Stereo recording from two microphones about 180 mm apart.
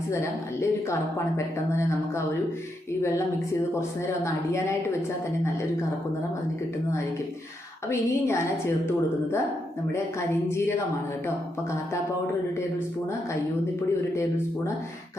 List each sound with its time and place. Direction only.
0.1 s a woman's voice: 15° left (ahead or behind)
3.8 s a woman's voice: 15° left (ahead or behind)
7.9 s a woman's voice: 15° left (ahead or behind)